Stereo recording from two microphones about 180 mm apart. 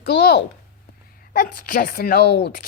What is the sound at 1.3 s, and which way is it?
Speech, 55° left (ahead or behind).